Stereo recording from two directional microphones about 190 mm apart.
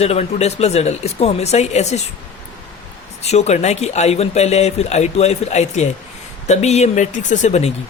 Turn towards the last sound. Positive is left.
turn(degrees=35)  # may be behind; listen again after turning